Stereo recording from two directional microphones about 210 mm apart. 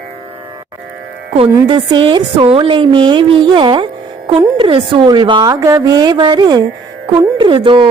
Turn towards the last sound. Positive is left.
turn(degrees=-25)  # may be behind; listen again after turning